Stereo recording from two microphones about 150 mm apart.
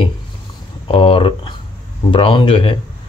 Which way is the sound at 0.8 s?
35° left (ahead or behind).